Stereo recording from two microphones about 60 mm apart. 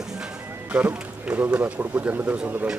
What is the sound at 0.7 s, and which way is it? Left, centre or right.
Speech, right.